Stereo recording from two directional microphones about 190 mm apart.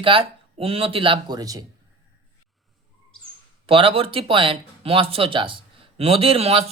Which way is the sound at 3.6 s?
30° right (ahead or behind).